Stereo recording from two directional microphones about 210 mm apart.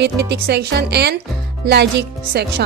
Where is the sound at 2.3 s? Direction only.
50° right (ahead or behind).